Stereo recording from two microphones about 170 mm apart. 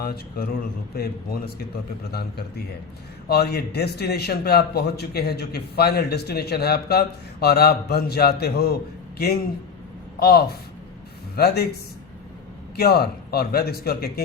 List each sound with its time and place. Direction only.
0.0 s a man's voice: 60° left (ahead or behind)
12.7 s a man's voice: 65° left (ahead or behind)